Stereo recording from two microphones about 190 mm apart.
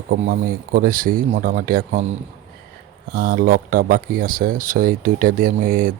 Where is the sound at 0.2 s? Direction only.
45° right (ahead or behind).